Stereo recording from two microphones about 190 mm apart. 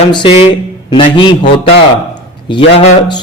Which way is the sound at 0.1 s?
25° left (ahead or behind).